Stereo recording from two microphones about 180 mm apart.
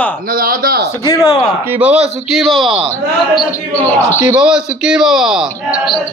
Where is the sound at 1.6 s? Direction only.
10° right (ahead or behind).